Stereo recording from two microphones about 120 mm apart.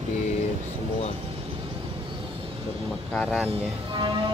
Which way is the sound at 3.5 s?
45° right (ahead or behind).